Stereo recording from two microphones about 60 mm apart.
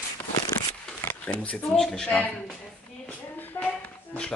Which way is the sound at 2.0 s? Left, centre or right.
Left.